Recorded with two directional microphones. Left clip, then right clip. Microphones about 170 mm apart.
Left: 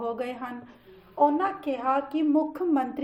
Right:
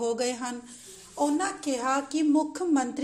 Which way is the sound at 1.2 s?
45° right (ahead or behind).